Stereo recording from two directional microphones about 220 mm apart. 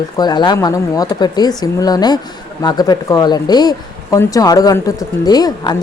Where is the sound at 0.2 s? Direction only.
20° left (ahead or behind).